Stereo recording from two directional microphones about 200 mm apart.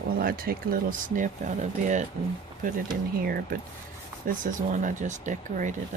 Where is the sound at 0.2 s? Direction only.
45° right (ahead or behind).